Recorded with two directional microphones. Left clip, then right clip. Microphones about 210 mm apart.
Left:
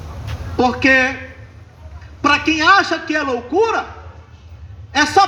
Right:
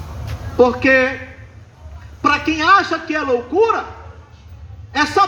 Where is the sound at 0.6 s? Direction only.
45° left (ahead or behind).